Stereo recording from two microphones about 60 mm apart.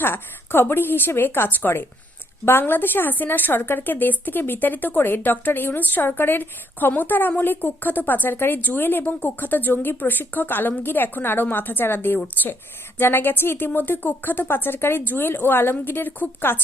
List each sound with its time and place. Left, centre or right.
0.0 s a woman's voice: left